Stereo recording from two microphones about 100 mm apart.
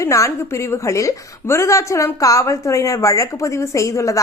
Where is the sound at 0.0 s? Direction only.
30° left (ahead or behind).